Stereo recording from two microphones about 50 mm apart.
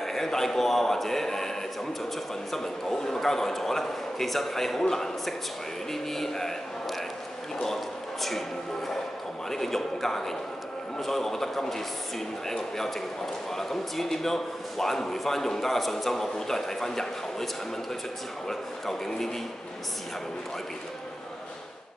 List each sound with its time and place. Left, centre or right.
0.0 s a man's voice: centre
18.5 s a man's voice: centre